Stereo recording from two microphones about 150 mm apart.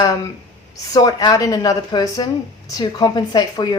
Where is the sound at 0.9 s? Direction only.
25° left (ahead or behind).